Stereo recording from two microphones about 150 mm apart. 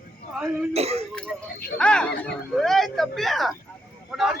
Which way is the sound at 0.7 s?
45° right (ahead or behind).